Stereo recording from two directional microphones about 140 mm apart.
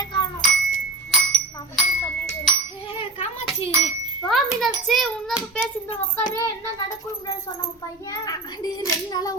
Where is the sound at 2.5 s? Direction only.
Centre (ahead or behind).